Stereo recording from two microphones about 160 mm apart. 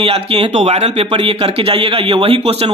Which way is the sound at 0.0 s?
40° right (ahead or behind).